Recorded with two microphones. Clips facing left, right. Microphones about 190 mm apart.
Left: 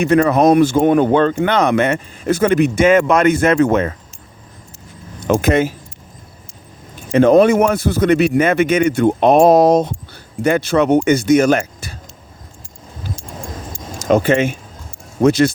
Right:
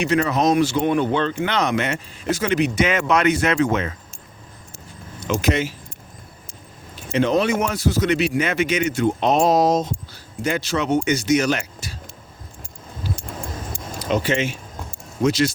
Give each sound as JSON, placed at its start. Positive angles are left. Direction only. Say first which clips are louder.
{"t": 0.0, "sound": "speech", "louder": "left 7 dB", "side_deg": 55}
{"t": 5.3, "sound": "speech", "louder": "left 7 dB", "side_deg": 55}
{"t": 7.1, "sound": "speech", "louder": "left 9 dB", "side_deg": 50}
{"t": 14.0, "sound": "speech", "louder": "left 8 dB", "side_deg": 50}